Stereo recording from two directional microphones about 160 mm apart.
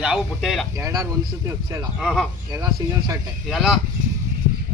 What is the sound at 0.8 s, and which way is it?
Speech, 20° right (ahead or behind).